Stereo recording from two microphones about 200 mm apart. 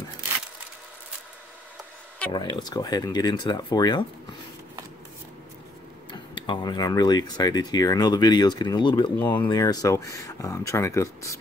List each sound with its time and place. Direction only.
2.3 s speech: 25° left (ahead or behind)
6.3 s speech: 25° left (ahead or behind)